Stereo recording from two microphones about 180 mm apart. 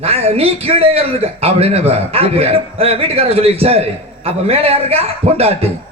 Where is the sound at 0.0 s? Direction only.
35° right (ahead or behind).